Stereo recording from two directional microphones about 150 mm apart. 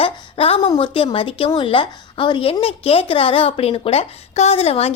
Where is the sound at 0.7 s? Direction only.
30° left (ahead or behind).